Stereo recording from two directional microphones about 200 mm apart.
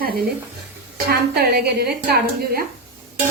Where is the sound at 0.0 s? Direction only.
50° right (ahead or behind).